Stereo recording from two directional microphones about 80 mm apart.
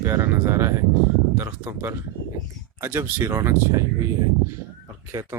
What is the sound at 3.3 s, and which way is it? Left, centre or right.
Speech, right.